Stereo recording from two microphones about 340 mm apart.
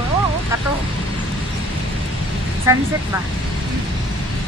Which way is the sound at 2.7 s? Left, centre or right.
Centre.